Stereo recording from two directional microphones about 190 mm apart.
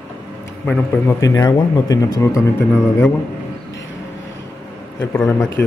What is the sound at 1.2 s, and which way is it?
Speech, 15° left (ahead or behind).